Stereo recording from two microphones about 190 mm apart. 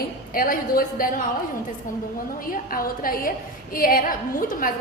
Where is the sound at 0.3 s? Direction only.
50° left (ahead or behind).